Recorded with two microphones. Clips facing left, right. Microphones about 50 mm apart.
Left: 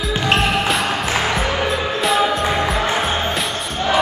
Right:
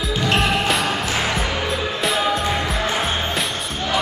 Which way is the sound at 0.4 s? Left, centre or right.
Centre.